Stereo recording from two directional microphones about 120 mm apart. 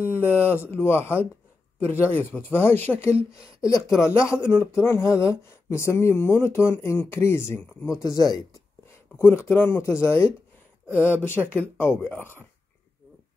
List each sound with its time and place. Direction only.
0.0 s speech: 20° left (ahead or behind)
9.1 s speech: 20° left (ahead or behind)
11.0 s speech: 15° right (ahead or behind)
11.8 s speech: 15° left (ahead or behind)